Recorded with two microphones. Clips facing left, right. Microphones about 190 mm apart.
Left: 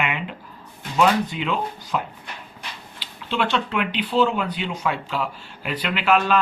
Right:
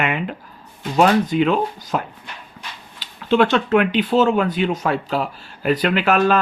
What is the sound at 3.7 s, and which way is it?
Speech, 50° right (ahead or behind).